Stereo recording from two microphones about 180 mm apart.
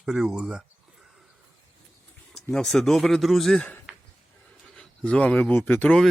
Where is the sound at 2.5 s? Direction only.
5° left (ahead or behind).